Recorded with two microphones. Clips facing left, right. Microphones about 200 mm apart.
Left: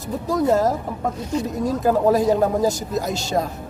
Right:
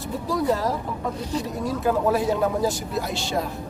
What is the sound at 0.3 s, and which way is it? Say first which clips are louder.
A woman's voice: left 5 dB; 45° left (ahead or behind).